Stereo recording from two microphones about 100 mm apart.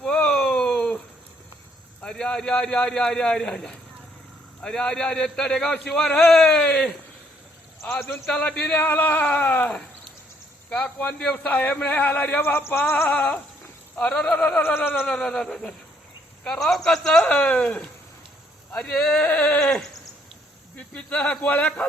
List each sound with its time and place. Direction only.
0.0 s a sound: 10° left (ahead or behind)
2.0 s a man's voice: 10° left (ahead or behind)
7.9 s a man's voice: 20° left (ahead or behind)
8.3 s a man's voice: 10° left (ahead or behind)
15.0 s a man's voice: 5° left (ahead or behind)